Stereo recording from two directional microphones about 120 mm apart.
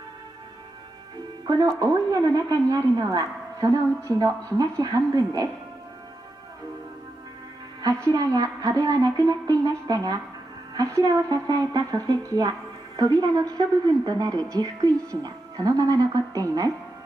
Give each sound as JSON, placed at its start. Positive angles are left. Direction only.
{"t": 1.8, "sound": "a woman's voice", "side_deg": -30}
{"t": 8.1, "sound": "a woman's voice", "side_deg": -30}